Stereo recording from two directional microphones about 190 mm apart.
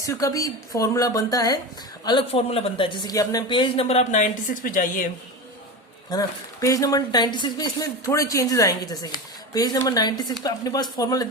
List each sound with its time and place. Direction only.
0.0 s a woman's voice: 15° left (ahead or behind); by 5.0 s 45° left (ahead or behind)
6.1 s speech: 20° left (ahead or behind)